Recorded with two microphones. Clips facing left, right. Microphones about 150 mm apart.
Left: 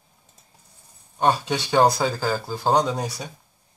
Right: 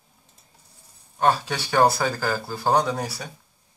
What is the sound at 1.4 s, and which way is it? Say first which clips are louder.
Speech: left 1 dB; 20° left (ahead or behind).